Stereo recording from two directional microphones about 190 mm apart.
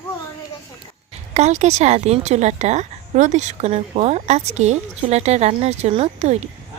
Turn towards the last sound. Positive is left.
turn(degrees=-35)  # may be behind; listen again after turning